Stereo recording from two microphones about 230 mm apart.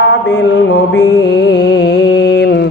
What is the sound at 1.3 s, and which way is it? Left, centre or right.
Carnatic music, left.